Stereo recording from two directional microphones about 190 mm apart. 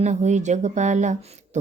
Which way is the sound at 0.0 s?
40° right (ahead or behind).